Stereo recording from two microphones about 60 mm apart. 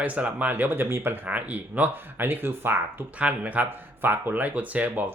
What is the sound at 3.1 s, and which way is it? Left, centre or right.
Speech, right.